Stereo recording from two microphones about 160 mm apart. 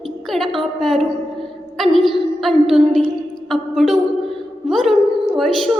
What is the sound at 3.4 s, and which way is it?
Music, centre (ahead or behind).